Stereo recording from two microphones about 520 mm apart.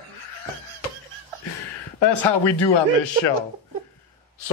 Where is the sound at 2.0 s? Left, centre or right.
Left.